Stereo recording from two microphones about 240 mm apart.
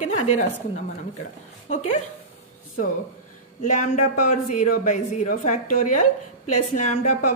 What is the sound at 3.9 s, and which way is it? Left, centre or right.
Speech, left.